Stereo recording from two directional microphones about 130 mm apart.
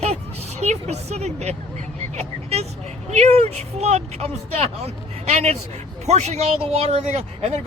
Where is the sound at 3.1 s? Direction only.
55° right (ahead or behind).